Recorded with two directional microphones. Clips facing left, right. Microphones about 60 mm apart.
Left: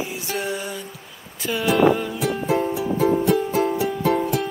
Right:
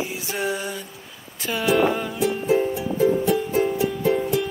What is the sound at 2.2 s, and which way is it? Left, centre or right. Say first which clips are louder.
Music: right 4 dB; left.